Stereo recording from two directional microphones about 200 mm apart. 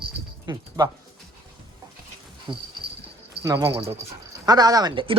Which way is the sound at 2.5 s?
25° right (ahead or behind).